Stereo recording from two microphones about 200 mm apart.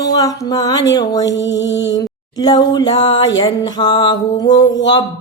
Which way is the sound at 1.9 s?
20° left (ahead or behind).